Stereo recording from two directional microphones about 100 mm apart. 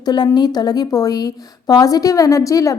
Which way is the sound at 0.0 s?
45° left (ahead or behind).